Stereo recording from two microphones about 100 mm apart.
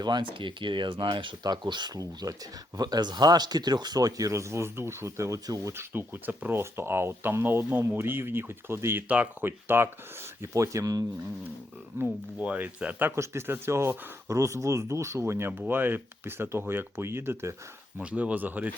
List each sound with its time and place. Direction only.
0.0 s speech: 50° right (ahead or behind); by 5.8 s 30° right (ahead or behind)
5.9 s speech: 20° right (ahead or behind)
11.9 s speech: 15° right (ahead or behind)
17.9 s speech: 15° right (ahead or behind)